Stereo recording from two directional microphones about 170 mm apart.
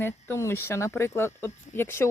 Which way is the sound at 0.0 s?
15° left (ahead or behind).